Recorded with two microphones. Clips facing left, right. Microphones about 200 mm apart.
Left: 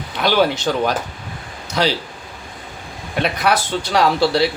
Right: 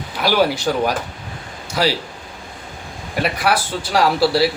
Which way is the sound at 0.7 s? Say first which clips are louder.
Even; 10° right (ahead or behind).